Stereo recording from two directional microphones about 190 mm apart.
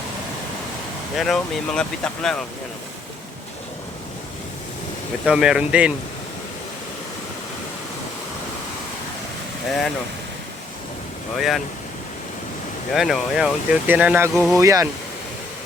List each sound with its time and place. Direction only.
1.1 s speech: centre (ahead or behind)
5.2 s speech: 5° right (ahead or behind)
9.6 s speech: centre (ahead or behind)
11.3 s speech: centre (ahead or behind)
12.9 s speech: centre (ahead or behind)
14.6 s speech: 15° right (ahead or behind)